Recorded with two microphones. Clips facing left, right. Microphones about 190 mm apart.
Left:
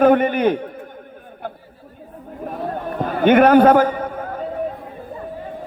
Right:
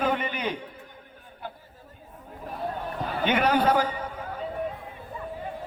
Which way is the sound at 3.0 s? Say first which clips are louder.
Left 12 dB; 50° left (ahead or behind).